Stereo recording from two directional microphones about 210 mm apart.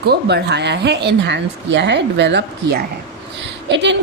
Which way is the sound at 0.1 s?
50° right (ahead or behind).